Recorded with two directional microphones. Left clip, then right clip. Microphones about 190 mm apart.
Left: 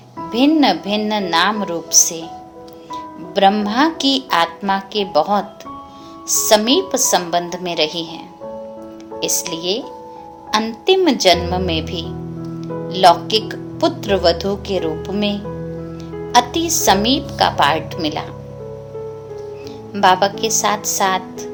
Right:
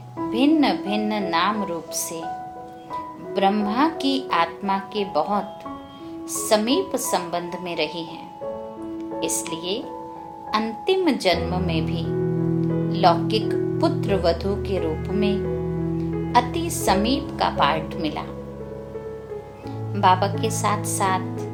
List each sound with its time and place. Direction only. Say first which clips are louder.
0.3 s speech: left 5 dB; 30° left (ahead or behind)
9.2 s speech: left 8 dB; 30° left (ahead or behind)
19.9 s speech: left 5 dB; 30° left (ahead or behind)